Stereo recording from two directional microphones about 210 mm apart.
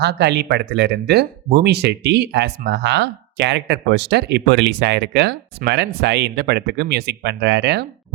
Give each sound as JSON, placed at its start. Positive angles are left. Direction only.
{"t": 0.0, "sound": "speech", "side_deg": -55}